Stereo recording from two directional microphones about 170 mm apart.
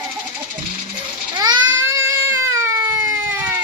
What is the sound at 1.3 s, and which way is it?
Baby cry, 25° right (ahead or behind).